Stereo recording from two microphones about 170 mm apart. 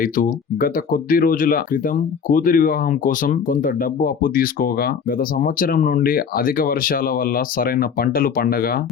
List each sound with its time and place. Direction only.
0.0 s speech: 55° left (ahead or behind)